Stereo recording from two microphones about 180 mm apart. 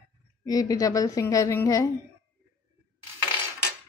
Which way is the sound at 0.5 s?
20° left (ahead or behind).